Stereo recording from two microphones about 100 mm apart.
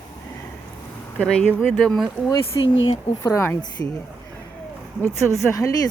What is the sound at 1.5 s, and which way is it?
Speech, 20° left (ahead or behind).